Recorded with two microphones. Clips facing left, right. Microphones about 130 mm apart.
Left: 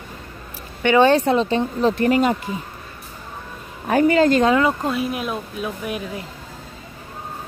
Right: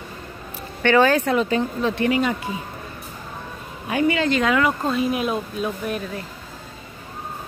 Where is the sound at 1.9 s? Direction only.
45° left (ahead or behind).